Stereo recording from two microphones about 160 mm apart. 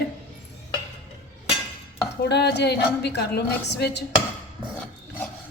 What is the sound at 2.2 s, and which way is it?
A woman's voice, 90° left.